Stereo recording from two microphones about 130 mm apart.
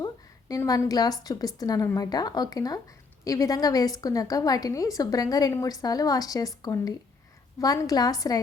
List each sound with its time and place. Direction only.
0.0 s a woman's voice: 25° left (ahead or behind)